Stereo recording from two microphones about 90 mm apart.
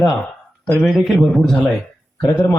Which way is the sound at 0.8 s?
5° right (ahead or behind).